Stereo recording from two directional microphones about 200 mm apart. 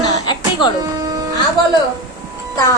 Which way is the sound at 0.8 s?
20° right (ahead or behind).